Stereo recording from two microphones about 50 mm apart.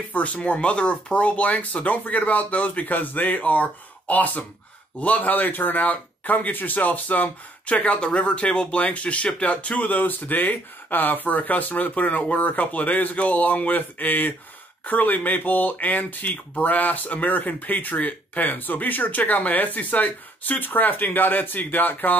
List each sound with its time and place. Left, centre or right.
0.1 s speech: left